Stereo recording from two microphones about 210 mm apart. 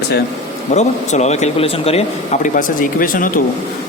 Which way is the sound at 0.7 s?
35° left (ahead or behind).